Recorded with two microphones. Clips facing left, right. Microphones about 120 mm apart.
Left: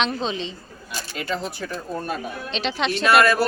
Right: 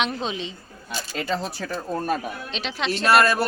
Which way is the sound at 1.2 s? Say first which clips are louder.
Right 1 dB; 30° right (ahead or behind).